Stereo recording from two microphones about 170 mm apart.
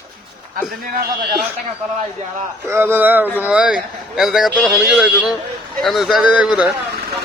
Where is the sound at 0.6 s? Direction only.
55° right (ahead or behind).